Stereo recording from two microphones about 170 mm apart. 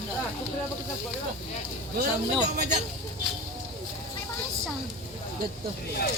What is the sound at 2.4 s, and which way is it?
Speech, 45° right (ahead or behind).